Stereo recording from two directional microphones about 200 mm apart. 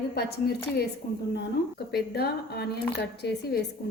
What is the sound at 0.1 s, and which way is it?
Speech, 50° left (ahead or behind).